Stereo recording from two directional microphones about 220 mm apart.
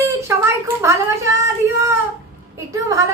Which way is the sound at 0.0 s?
10° right (ahead or behind).